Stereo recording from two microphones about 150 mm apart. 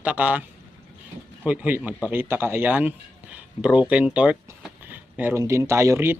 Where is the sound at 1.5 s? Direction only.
10° right (ahead or behind).